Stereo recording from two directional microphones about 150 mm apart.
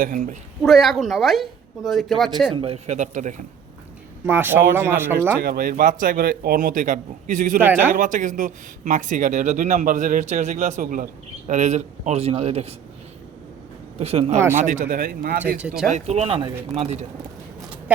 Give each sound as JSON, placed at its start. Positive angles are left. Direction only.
{"t": 0.0, "sound": "speech", "side_deg": -55}
{"t": 0.6, "sound": "speech", "side_deg": 0}
{"t": 2.5, "sound": "a man's voice", "side_deg": -40}
{"t": 4.3, "sound": "speech", "side_deg": -15}
{"t": 5.4, "sound": "a man's voice", "side_deg": -75}
{"t": 7.6, "sound": "speech", "side_deg": -10}
{"t": 7.9, "sound": "a man's voice", "side_deg": -60}
{"t": 14.0, "sound": "a man's voice", "side_deg": -45}
{"t": 15.5, "sound": "speech", "side_deg": -5}
{"t": 15.9, "sound": "a man's voice", "side_deg": -45}